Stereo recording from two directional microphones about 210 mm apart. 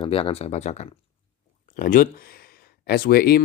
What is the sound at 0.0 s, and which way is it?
Speech, 25° left (ahead or behind).